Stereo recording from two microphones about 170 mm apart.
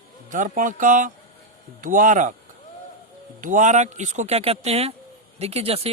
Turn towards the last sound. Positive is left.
turn(degrees=-35)  # may be behind; listen again after turning